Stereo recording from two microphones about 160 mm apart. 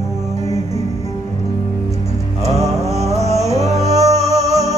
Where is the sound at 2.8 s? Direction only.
40° right (ahead or behind).